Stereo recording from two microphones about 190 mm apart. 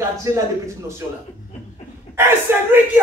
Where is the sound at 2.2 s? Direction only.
10° right (ahead or behind).